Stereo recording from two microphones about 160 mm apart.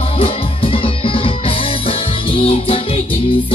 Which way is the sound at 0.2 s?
35° left (ahead or behind).